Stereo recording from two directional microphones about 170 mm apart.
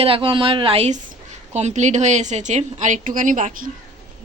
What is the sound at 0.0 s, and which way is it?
A woman's voice, 30° right (ahead or behind).